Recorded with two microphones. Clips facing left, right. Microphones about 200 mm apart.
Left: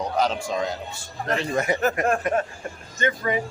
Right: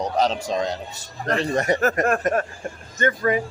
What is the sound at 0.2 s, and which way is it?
A man's voice, 40° right (ahead or behind).